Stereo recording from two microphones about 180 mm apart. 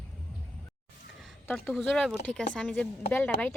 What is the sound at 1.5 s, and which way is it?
Speech, centre (ahead or behind).